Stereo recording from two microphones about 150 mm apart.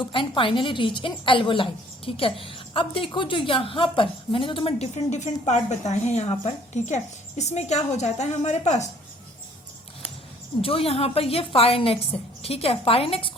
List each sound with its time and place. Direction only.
0.0 s a woman's voice: 35° left (ahead or behind)
10.6 s a woman's voice: 40° left (ahead or behind)